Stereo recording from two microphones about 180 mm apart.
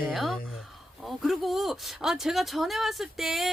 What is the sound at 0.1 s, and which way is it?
Speech, centre (ahead or behind).